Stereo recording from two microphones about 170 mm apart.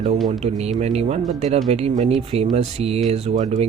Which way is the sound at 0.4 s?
40° right (ahead or behind).